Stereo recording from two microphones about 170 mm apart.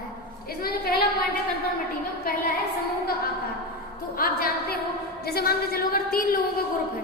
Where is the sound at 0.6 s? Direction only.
65° left (ahead or behind).